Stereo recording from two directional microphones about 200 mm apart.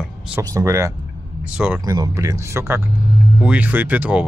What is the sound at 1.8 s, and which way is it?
Speech, 20° right (ahead or behind).